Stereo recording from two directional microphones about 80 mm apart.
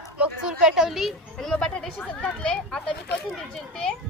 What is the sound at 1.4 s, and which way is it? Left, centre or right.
A child's voice, centre.